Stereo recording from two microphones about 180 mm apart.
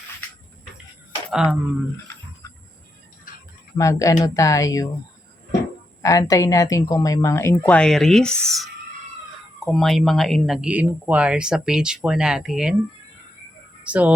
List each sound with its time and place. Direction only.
1.3 s speech: 5° right (ahead or behind)
2.4 s train: 15° left (ahead or behind)
3.8 s a woman's voice: 20° left (ahead or behind)
6.0 s a woman's voice: 20° left (ahead or behind); by 12.7 s 5° right (ahead or behind)
13.8 s speech: 5° right (ahead or behind)